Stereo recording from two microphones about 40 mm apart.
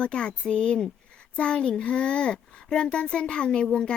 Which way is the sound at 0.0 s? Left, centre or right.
Left.